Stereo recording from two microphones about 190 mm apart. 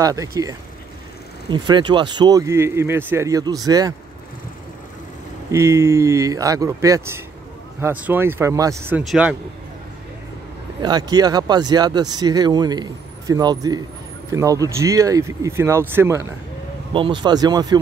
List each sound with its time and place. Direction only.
0.0 s speech: 20° right (ahead or behind)
5.5 s speech: 15° right (ahead or behind)
9.1 s speech: centre (ahead or behind)
10.8 s speech: 20° right (ahead or behind)
16.9 s speech: 25° right (ahead or behind)